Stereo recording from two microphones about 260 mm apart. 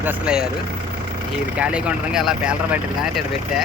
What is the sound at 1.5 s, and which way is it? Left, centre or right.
Speech, centre.